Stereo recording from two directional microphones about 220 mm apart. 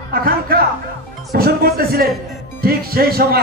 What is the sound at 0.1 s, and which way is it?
A man's voice, 45° right (ahead or behind).